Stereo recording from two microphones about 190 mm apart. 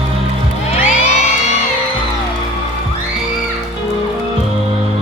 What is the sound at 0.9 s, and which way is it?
Music, 35° left (ahead or behind).